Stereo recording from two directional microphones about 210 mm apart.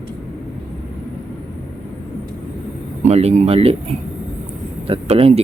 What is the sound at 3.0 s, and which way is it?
Speech, 30° right (ahead or behind).